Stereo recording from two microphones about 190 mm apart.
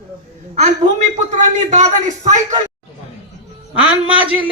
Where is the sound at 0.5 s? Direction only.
35° right (ahead or behind).